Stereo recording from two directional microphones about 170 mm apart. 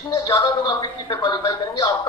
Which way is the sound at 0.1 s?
25° left (ahead or behind).